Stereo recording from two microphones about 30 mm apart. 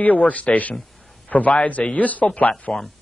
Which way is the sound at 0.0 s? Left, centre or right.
Left.